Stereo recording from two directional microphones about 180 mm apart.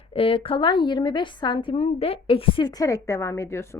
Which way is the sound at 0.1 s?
30° left (ahead or behind).